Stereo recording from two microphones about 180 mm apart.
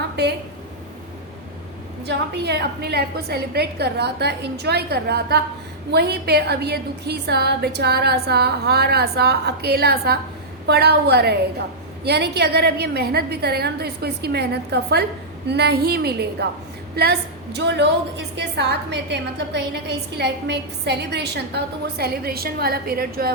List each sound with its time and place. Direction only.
0.2 s a woman's voice: 65° right (ahead or behind)
2.0 s a woman's voice: 70° right (ahead or behind)